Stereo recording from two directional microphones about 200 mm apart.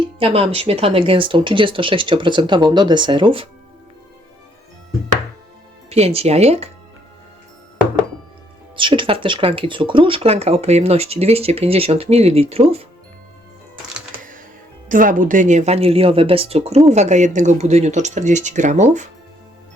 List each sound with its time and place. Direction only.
0.0 s speech: 30° right (ahead or behind)
5.9 s speech: 30° right (ahead or behind)
8.7 s speech: 25° right (ahead or behind)
14.8 s speech: 40° right (ahead or behind)